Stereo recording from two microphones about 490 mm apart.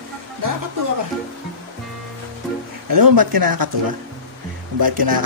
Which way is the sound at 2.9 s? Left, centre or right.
Right.